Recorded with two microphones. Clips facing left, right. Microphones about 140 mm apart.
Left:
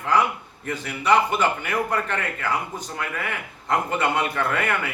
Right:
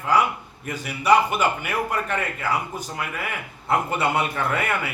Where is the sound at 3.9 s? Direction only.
10° right (ahead or behind).